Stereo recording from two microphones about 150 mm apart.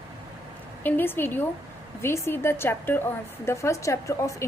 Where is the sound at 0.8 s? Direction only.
15° left (ahead or behind).